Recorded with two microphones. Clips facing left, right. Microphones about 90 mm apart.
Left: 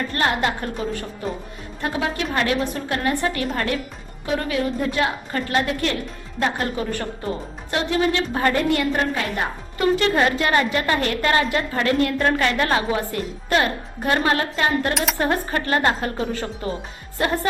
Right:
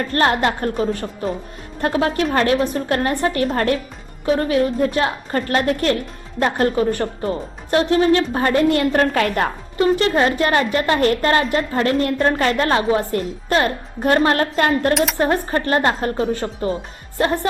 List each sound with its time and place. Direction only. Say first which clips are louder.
0.1 s a woman's voice: right 6 dB; 45° right (ahead or behind)
8.9 s a woman's voice: right 6 dB; 60° right (ahead or behind)
9.7 s a woman's voice: right 2 dB; 30° right (ahead or behind); by 14.9 s 45° right (ahead or behind)
15.2 s a woman's voice: right 3 dB; 30° right (ahead or behind)